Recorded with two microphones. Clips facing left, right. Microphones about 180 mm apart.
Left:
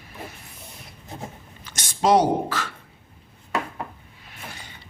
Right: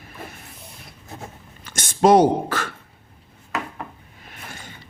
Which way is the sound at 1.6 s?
50° right (ahead or behind).